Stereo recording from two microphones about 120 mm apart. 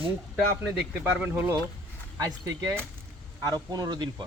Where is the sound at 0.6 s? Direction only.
15° right (ahead or behind).